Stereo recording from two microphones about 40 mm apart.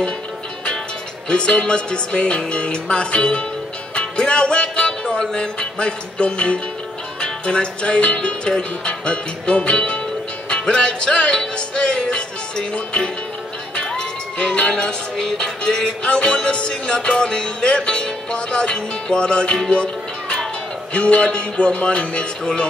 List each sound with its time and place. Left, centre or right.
1.3 s music: left